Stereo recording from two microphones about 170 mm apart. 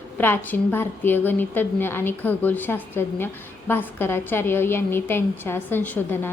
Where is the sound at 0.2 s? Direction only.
10° left (ahead or behind).